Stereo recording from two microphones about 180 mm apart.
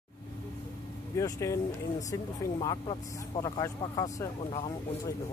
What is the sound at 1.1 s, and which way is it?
Speech, 15° left (ahead or behind).